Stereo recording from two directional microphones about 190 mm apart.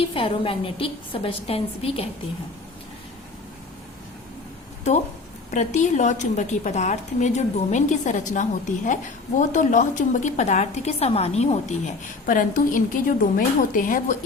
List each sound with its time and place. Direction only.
0.1 s a woman's voice: 30° left (ahead or behind)
5.5 s a woman's voice: 40° left (ahead or behind)
12.2 s a woman's voice: 45° left (ahead or behind)